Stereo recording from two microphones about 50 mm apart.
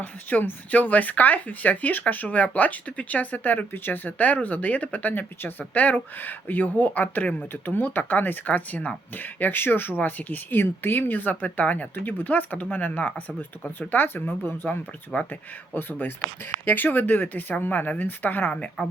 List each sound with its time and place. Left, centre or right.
0.0 s speech: left